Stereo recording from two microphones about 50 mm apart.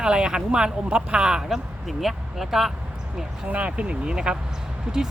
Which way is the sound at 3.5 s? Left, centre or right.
Right.